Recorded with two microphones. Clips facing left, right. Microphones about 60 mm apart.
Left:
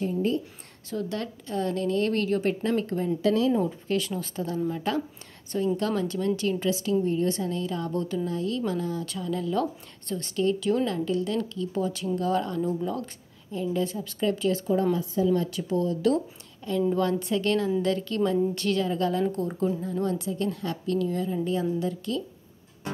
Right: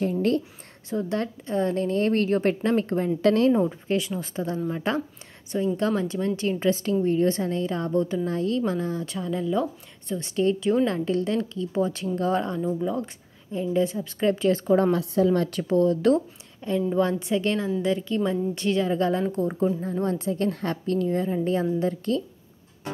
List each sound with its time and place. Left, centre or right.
0.8 s a woman's voice: right
3.2 s speech: right
3.5 s a woman's voice: right
12.6 s speech: centre; by 14.6 s right
14.7 s speech: right
16.9 s speech: right
19.8 s a woman's voice: right